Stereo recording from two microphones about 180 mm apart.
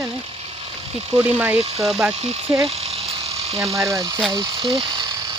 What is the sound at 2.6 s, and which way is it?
Speech, 35° right (ahead or behind).